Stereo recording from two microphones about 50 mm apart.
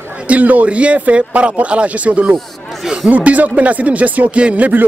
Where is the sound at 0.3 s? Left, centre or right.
Right.